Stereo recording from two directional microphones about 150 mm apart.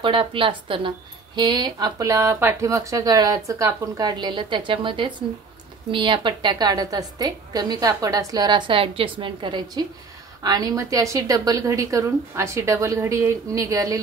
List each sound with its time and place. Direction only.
0.0 s speech: 35° right (ahead or behind)